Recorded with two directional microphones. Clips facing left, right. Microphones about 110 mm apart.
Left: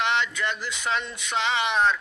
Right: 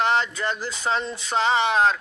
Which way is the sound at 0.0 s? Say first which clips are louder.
Right 3 dB; 40° right (ahead or behind).